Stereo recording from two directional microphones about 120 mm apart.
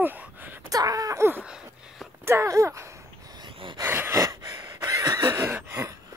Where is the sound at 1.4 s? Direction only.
5° right (ahead or behind).